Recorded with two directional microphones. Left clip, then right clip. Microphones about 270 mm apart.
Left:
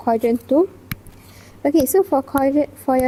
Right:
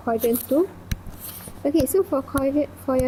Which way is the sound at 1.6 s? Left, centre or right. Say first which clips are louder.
Left 4 dB; left.